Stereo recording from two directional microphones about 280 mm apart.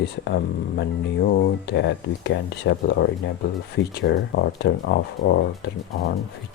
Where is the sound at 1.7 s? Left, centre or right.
Left.